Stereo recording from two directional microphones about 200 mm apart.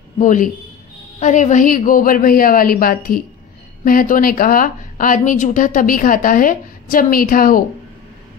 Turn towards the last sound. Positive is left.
turn(degrees=45)  # may be behind; listen again after turning